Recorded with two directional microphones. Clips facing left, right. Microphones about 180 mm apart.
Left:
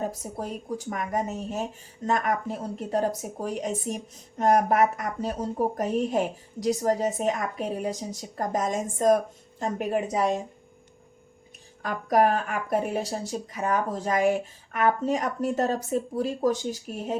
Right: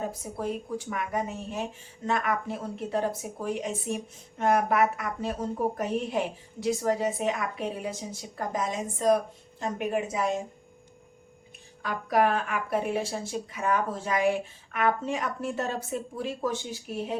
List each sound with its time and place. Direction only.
0.1 s speech: 40° left (ahead or behind)
11.8 s speech: 45° left (ahead or behind)